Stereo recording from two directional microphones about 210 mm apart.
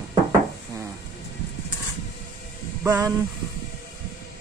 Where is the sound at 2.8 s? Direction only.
15° right (ahead or behind).